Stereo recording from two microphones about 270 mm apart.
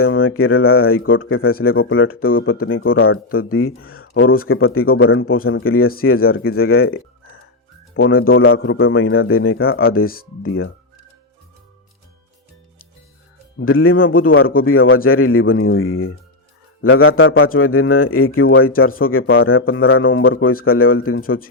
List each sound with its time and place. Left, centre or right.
0.0 s a man's voice: left
13.6 s a man's voice: left
21.2 s speech: left